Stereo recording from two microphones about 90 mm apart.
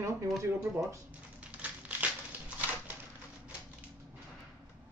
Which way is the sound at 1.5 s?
15° right (ahead or behind).